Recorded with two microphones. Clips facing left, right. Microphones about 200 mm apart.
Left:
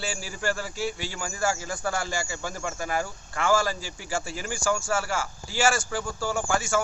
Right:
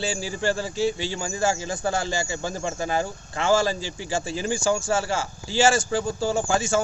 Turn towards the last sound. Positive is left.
turn(degrees=-20)  # may be behind; listen again after turning